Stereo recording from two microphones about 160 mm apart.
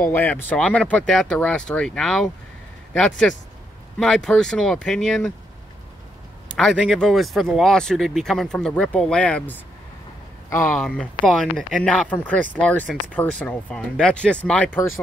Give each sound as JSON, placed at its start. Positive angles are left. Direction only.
{"t": 0.1, "sound": "speech", "side_deg": 10}
{"t": 6.7, "sound": "speech", "side_deg": -5}